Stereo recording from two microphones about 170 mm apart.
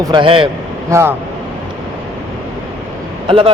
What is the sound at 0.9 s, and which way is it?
Speech, 15° right (ahead or behind).